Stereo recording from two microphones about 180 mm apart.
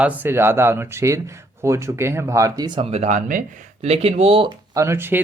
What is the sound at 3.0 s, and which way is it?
Speech, 45° right (ahead or behind).